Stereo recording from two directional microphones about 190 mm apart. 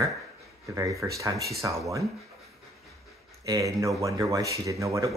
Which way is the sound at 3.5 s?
15° right (ahead or behind).